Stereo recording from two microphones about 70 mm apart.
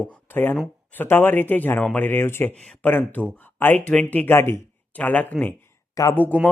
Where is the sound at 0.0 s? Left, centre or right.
Left.